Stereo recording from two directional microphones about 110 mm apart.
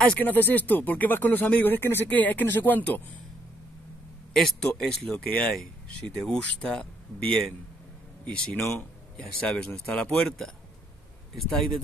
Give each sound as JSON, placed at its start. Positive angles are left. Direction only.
{"t": 0.1, "sound": "speech", "side_deg": 15}
{"t": 4.3, "sound": "speech", "side_deg": 5}
{"t": 8.3, "sound": "speech", "side_deg": 20}
{"t": 9.1, "sound": "speech", "side_deg": 10}